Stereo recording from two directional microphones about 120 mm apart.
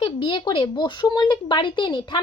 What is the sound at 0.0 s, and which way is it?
A woman's voice, 45° left (ahead or behind).